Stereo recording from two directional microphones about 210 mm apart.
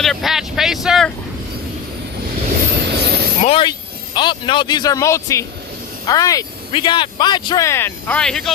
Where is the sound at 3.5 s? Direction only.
25° left (ahead or behind).